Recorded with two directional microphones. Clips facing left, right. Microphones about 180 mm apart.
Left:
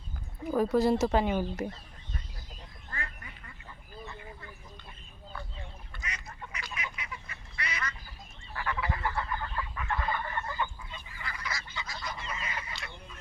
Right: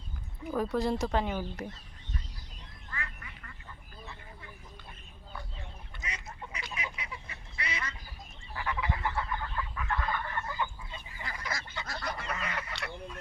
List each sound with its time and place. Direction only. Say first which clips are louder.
0.5 s speech: left 5 dB; 5° left (ahead or behind)
5.9 s duck: right 2 dB; 25° right (ahead or behind)
8.5 s frog: left 1 dB; 20° right (ahead or behind)
9.4 s fowl: even; centre (ahead or behind)
11.2 s duck: right 1 dB; 45° right (ahead or behind); by 13.1 s 70° right (ahead or behind)